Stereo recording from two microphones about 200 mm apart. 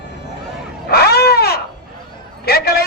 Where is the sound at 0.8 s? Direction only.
55° left (ahead or behind).